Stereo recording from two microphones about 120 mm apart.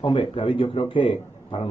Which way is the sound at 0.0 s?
45° left (ahead or behind).